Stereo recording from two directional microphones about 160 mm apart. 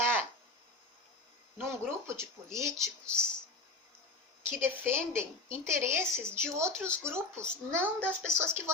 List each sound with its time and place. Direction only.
1.5 s speech: 15° right (ahead or behind)
4.4 s speech: 15° right (ahead or behind)